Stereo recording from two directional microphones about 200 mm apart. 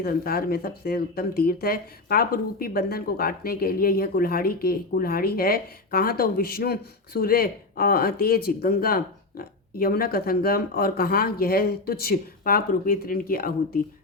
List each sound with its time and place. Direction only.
0.0 s speech: 50° left (ahead or behind)